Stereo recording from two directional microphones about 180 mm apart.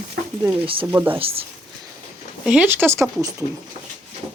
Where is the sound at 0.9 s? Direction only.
10° right (ahead or behind).